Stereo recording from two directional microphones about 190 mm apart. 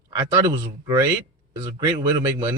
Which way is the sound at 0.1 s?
15° right (ahead or behind).